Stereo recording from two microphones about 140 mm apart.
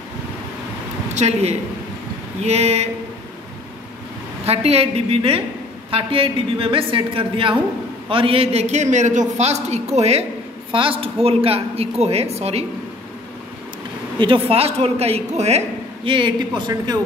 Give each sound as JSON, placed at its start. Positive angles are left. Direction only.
{"t": 1.1, "sound": "a woman's voice", "side_deg": -50}
{"t": 4.5, "sound": "a woman's voice", "side_deg": -45}
{"t": 14.1, "sound": "a man's voice", "side_deg": -35}